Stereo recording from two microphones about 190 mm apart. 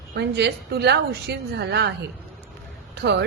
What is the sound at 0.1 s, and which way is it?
A woman's voice, 60° right (ahead or behind).